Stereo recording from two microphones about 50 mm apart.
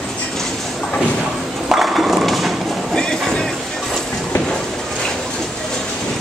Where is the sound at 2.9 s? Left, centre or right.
Centre.